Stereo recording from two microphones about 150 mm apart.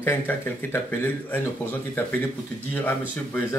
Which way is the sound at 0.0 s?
15° left (ahead or behind).